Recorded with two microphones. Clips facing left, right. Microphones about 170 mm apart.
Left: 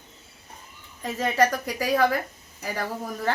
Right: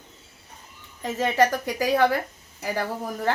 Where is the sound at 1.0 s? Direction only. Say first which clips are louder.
Right 1 dB; 20° right (ahead or behind).